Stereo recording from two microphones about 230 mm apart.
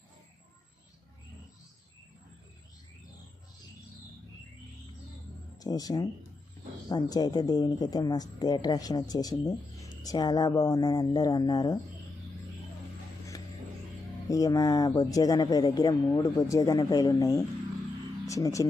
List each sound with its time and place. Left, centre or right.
5.5 s speech: centre
14.3 s speech: centre